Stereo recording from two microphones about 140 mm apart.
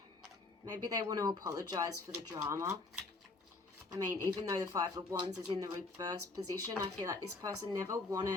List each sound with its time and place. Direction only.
0.6 s speech: 25° right (ahead or behind)
3.9 s speech: 25° right (ahead or behind)